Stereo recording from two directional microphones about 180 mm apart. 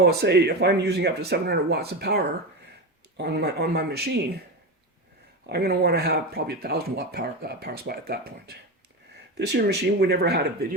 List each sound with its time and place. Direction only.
0.0 s speech: 65° right (ahead or behind)
5.5 s speech: 65° right (ahead or behind)